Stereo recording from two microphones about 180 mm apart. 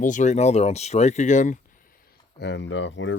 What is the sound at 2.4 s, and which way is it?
Speech, 75° left (ahead or behind).